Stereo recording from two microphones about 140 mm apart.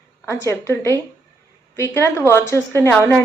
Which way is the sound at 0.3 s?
20° left (ahead or behind).